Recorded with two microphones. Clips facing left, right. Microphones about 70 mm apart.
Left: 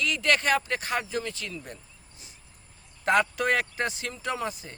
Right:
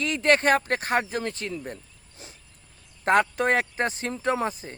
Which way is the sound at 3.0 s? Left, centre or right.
Right.